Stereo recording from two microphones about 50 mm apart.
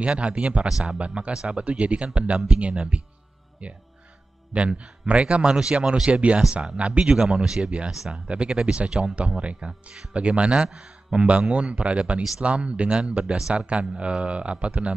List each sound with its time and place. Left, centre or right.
0.0 s a man's voice: right
7.2 s a man's voice: centre